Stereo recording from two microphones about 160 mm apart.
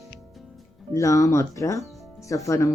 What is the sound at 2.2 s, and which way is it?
Speech, 20° left (ahead or behind).